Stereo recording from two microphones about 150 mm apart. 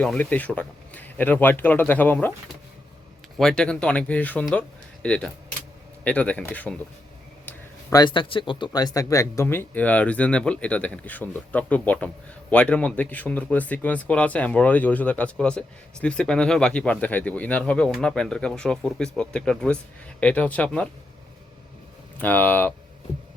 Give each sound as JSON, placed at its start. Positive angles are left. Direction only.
{"t": 0.0, "sound": "speech", "side_deg": 10}
{"t": 3.3, "sound": "speech", "side_deg": 5}
{"t": 7.4, "sound": "a sound", "side_deg": 15}
{"t": 8.0, "sound": "speech", "side_deg": 35}
{"t": 22.2, "sound": "speech", "side_deg": 10}